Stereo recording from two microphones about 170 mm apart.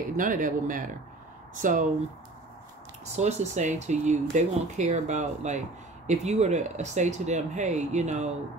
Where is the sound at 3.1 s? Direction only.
40° right (ahead or behind).